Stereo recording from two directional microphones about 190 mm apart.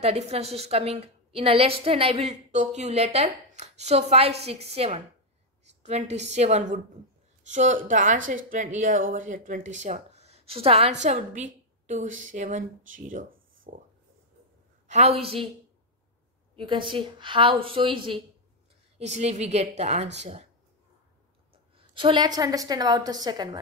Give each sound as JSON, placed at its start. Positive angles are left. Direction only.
{"t": 0.0, "sound": "a woman's voice", "side_deg": -35}
{"t": 14.9, "sound": "a woman's voice", "side_deg": -35}
{"t": 16.5, "sound": "a woman's voice", "side_deg": -25}
{"t": 21.7, "sound": "a woman's voice", "side_deg": -25}